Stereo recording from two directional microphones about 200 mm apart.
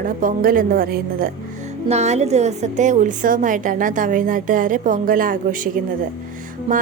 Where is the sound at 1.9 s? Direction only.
35° right (ahead or behind).